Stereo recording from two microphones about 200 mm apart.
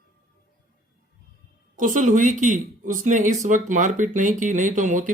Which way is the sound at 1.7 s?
40° right (ahead or behind).